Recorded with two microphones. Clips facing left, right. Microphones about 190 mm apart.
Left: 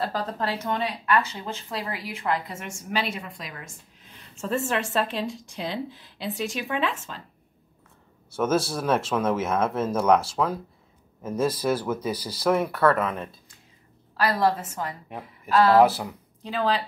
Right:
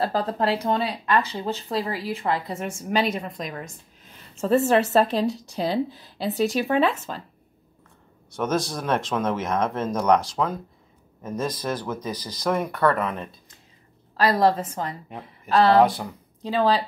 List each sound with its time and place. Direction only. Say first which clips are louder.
0.0 s speech: right 5 dB; 35° right (ahead or behind)
8.3 s speech: left 1 dB; 5° left (ahead or behind)
14.2 s speech: right 3 dB; 35° right (ahead or behind)
15.8 s speech: even; 5° left (ahead or behind)
16.4 s speech: right 4 dB; 35° right (ahead or behind)